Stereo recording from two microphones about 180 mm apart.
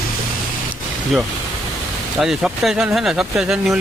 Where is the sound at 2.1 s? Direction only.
Centre (ahead or behind).